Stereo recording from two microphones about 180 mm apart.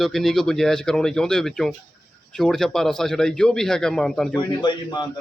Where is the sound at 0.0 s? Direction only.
Centre (ahead or behind).